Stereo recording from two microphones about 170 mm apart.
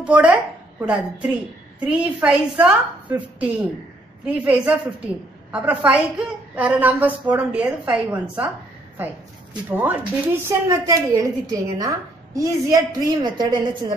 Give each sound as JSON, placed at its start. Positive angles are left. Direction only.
{"t": 0.0, "sound": "a woman's voice", "side_deg": -10}
{"t": 9.7, "sound": "a woman's voice", "side_deg": -10}